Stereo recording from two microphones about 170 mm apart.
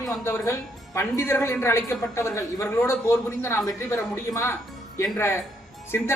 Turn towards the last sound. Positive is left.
turn(degrees=15)  # may be behind; listen again after turning